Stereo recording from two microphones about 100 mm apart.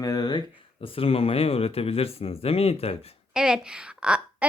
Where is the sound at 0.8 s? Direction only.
65° left (ahead or behind); by 3.2 s 85° left.